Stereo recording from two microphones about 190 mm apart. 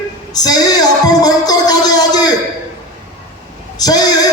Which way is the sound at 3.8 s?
20° left (ahead or behind).